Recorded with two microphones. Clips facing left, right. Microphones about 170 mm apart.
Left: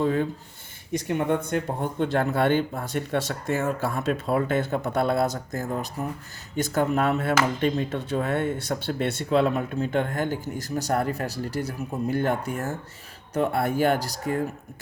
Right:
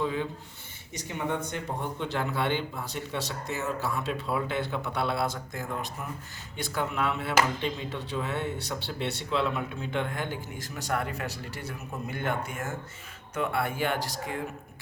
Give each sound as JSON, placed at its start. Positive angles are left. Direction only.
{"t": 0.0, "sound": "speech", "side_deg": 45}
{"t": 1.0, "sound": "speech", "side_deg": 60}